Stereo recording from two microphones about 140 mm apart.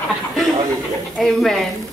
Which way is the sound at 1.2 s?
Centre (ahead or behind).